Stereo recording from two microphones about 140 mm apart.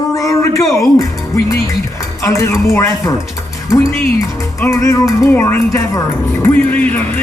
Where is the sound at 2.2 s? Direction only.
20° left (ahead or behind).